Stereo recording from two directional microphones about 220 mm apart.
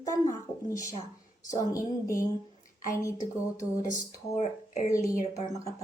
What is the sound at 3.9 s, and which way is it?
Speech, 30° left (ahead or behind).